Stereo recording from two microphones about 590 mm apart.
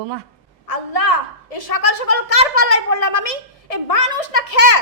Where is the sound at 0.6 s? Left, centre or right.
Left.